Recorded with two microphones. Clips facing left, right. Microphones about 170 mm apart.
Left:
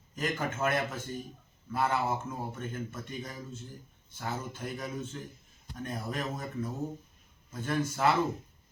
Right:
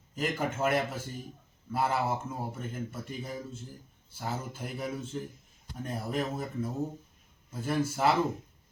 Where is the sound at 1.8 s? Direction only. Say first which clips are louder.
Even; 30° right (ahead or behind).